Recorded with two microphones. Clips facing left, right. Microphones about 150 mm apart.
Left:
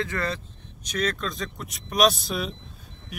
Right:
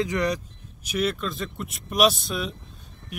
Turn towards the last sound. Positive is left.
turn(degrees=0)  # may be behind; listen again after turning